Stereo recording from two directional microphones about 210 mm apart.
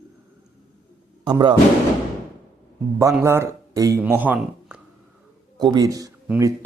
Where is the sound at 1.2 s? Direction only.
20° right (ahead or behind).